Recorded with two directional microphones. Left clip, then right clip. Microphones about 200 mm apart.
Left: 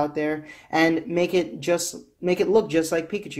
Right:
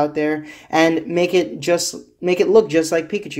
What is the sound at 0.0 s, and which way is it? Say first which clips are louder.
Speech: right 6 dB; 5° right (ahead or behind).